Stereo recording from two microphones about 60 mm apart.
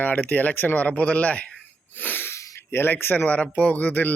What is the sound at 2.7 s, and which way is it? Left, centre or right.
A man's voice, left.